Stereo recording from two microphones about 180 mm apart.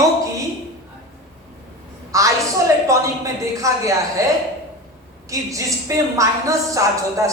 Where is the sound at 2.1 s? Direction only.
15° right (ahead or behind).